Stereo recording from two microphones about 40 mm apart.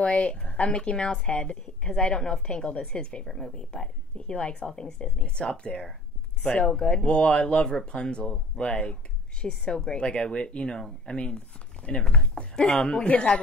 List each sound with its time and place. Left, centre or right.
0.0 s a woman's voice: left
3.3 s a woman's voice: centre; by 13.4 s left